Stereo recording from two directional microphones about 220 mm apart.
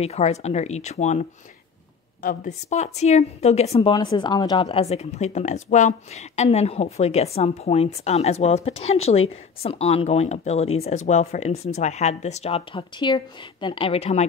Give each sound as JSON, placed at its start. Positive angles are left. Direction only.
{"t": 0.0, "sound": "speech", "side_deg": 30}
{"t": 2.2, "sound": "a woman's voice", "side_deg": 35}